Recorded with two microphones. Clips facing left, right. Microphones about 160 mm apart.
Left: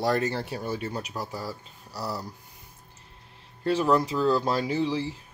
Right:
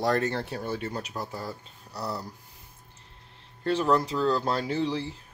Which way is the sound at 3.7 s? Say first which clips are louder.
Left 1 dB; 5° left (ahead or behind).